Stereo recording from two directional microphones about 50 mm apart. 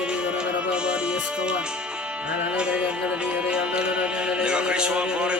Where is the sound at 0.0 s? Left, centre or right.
Centre.